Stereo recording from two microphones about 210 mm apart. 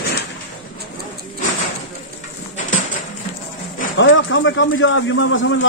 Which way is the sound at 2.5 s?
35° left (ahead or behind).